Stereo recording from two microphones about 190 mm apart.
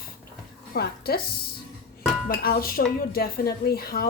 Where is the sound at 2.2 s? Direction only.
50° left (ahead or behind).